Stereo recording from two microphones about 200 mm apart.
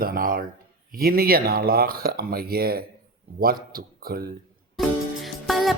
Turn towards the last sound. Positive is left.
turn(degrees=0)  # may be behind; listen again after turning